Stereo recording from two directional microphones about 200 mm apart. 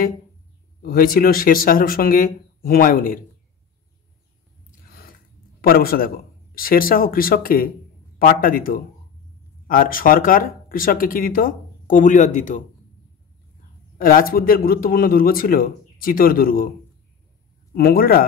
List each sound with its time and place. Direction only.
0.8 s speech: 45° left (ahead or behind)
4.6 s a sound: 50° left (ahead or behind)
5.6 s speech: 50° left (ahead or behind)
13.9 s speech: 45° left (ahead or behind)
17.7 s speech: 50° left (ahead or behind)